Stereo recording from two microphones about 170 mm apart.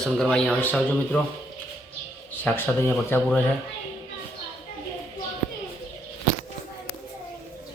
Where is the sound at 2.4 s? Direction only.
10° left (ahead or behind).